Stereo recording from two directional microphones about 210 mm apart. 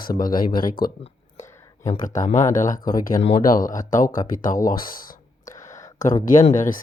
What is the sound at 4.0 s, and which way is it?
Speech, 15° left (ahead or behind).